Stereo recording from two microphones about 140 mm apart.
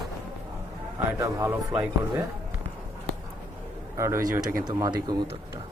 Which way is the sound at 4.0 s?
20° right (ahead or behind).